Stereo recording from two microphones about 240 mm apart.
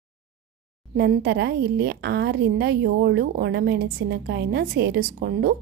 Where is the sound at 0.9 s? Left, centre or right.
Right.